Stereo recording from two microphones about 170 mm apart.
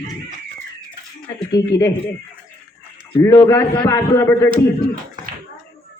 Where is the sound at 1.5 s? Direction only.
20° left (ahead or behind).